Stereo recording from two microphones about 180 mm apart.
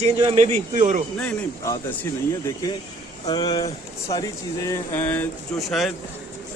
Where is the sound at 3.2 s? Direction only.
20° left (ahead or behind).